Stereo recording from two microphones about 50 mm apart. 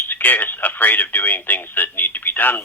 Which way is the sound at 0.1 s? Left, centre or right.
Left.